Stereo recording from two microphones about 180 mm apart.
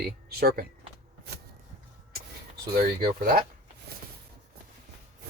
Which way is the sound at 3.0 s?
55° right (ahead or behind).